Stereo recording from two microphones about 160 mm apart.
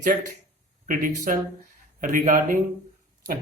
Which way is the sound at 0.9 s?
55° right (ahead or behind).